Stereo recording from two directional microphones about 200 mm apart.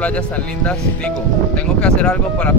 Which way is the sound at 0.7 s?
5° left (ahead or behind).